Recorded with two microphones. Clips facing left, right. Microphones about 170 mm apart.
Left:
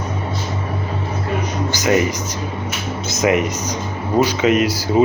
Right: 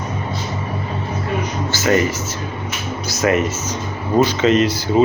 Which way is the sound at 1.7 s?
15° left (ahead or behind).